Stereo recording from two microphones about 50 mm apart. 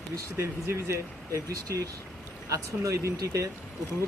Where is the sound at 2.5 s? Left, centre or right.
Right.